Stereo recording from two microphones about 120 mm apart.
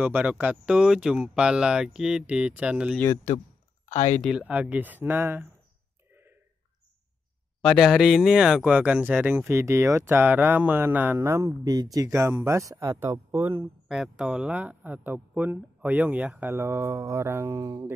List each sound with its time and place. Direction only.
0.0 s a man's voice: 10° right (ahead or behind)
3.9 s speech: 70° left (ahead or behind)
4.2 s a man's voice: 5° right (ahead or behind)
7.6 s speech: 5° left (ahead or behind); by 13.7 s 20° right (ahead or behind)
13.8 s a man's voice: 5° right (ahead or behind); by 17.8 s 30° right (ahead or behind)